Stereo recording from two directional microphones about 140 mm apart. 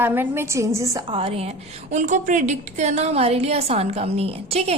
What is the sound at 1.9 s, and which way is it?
A woman's voice, 60° right (ahead or behind).